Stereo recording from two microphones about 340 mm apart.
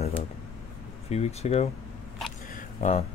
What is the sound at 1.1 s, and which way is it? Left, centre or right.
Speech, centre.